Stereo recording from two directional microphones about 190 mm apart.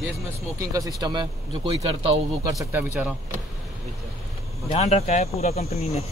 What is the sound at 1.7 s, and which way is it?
Speech, 30° right (ahead or behind).